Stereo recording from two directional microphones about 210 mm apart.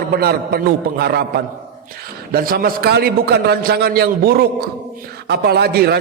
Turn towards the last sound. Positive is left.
turn(degrees=-50)  # may be behind; listen again after turning